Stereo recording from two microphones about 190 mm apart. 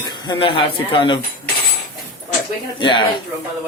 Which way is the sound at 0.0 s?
20° left (ahead or behind).